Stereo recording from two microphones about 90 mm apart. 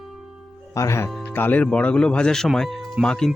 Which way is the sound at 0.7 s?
35° left (ahead or behind).